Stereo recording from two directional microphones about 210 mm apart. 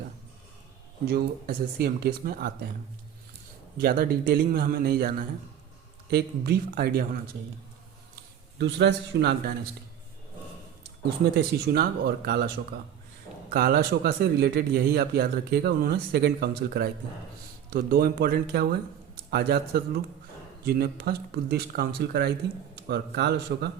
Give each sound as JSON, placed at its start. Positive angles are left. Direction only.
{"t": 1.0, "sound": "speech", "side_deg": -45}
{"t": 3.8, "sound": "speech", "side_deg": -45}
{"t": 8.5, "sound": "speech", "side_deg": -55}
{"t": 11.0, "sound": "speech", "side_deg": -50}
{"t": 13.5, "sound": "speech", "side_deg": -45}